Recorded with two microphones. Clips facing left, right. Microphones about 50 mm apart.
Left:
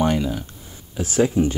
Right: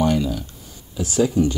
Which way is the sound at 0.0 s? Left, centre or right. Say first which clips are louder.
Right 1 dB; left.